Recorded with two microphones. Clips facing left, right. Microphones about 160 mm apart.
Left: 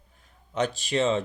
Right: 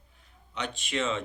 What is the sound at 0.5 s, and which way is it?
Speech, 40° left (ahead or behind).